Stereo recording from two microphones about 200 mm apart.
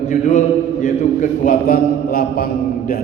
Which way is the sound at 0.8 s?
40° left (ahead or behind).